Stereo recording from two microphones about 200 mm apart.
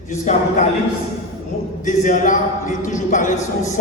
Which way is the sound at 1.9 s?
40° left (ahead or behind).